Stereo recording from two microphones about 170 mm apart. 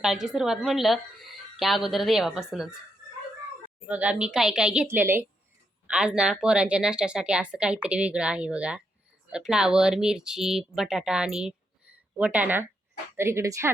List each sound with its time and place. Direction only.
0.0 s speech: 5° right (ahead or behind)
3.8 s a woman's voice: 5° right (ahead or behind)